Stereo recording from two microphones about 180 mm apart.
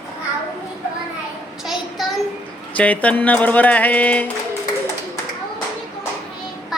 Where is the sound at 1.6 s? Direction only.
Centre (ahead or behind).